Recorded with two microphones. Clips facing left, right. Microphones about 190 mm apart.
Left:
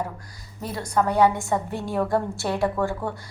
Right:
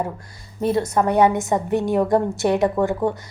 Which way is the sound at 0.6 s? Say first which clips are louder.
Right 6 dB; 25° right (ahead or behind).